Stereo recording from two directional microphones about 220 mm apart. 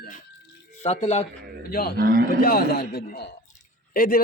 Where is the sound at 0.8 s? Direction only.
30° left (ahead or behind).